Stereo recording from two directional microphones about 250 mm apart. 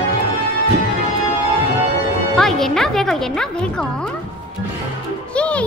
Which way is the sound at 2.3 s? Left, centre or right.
Centre.